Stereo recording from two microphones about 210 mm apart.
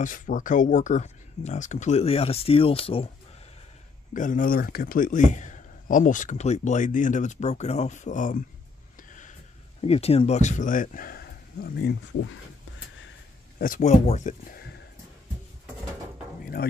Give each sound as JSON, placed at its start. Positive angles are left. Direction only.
{"t": 0.0, "sound": "speech", "side_deg": 40}
{"t": 4.1, "sound": "speech", "side_deg": 40}
{"t": 9.8, "sound": "speech", "side_deg": 30}
{"t": 13.6, "sound": "speech", "side_deg": 35}